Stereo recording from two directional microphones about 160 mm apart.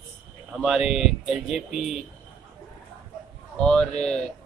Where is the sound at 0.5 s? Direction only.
Centre (ahead or behind).